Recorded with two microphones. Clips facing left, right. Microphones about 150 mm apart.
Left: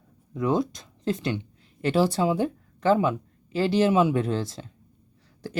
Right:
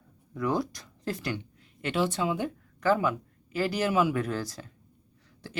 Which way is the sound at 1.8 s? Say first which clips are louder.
Left 6 dB; 35° left (ahead or behind).